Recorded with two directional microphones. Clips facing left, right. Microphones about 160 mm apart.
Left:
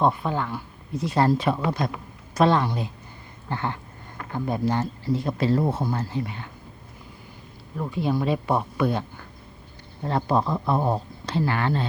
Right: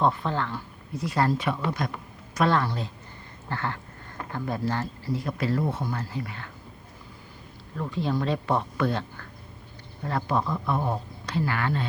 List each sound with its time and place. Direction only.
0.0 s speech: 10° left (ahead or behind)
1.0 s speech: 25° left (ahead or behind)
7.8 s speech: 15° left (ahead or behind)
10.0 s speech: 25° left (ahead or behind)